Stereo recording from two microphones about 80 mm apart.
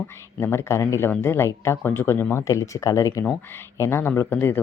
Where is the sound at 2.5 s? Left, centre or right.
Left.